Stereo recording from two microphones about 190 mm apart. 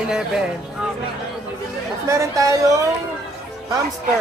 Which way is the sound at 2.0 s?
15° right (ahead or behind).